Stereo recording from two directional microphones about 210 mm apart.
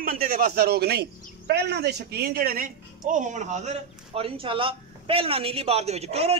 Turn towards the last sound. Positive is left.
turn(degrees=-30)  # may be behind; listen again after turning